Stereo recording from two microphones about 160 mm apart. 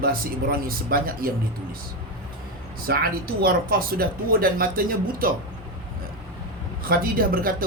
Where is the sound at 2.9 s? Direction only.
70° right (ahead or behind).